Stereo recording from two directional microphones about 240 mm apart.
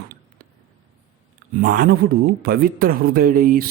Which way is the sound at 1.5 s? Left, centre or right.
Right.